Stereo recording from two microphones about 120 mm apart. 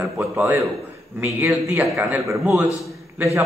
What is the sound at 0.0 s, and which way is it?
A man's voice, 20° right (ahead or behind).